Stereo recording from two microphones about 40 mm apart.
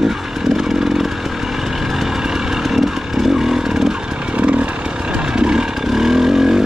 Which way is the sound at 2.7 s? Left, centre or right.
Centre.